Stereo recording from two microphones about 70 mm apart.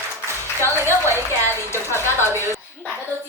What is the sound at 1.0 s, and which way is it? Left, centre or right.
Speech, right.